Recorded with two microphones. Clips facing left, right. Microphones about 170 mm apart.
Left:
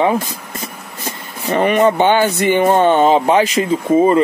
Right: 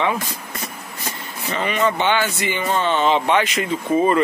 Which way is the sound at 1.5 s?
50° left (ahead or behind).